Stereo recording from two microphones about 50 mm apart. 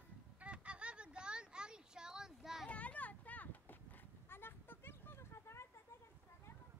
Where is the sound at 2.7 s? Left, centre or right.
Left.